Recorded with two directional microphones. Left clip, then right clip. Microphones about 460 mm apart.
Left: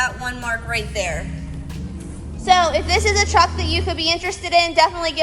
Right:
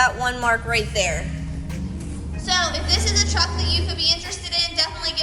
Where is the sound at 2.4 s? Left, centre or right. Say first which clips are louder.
Left 7 dB; centre.